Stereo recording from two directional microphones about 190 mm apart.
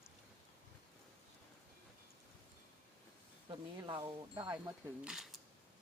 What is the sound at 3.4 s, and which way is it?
Speech, 25° right (ahead or behind).